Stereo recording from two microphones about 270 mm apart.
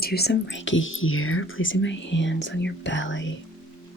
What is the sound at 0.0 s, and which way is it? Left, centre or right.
Speech, left.